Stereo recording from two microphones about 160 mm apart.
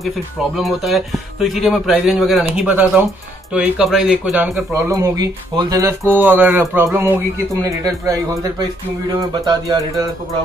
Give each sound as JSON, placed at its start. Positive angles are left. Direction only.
{"t": 0.6, "sound": "speech", "side_deg": 0}
{"t": 4.7, "sound": "speech", "side_deg": -20}
{"t": 5.9, "sound": "a sound", "side_deg": -15}
{"t": 8.1, "sound": "speech", "side_deg": -20}